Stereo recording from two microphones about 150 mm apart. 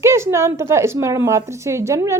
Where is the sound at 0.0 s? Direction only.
15° right (ahead or behind).